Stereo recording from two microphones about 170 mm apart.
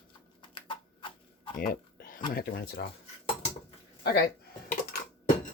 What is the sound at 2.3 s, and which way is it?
Speech, 65° left (ahead or behind).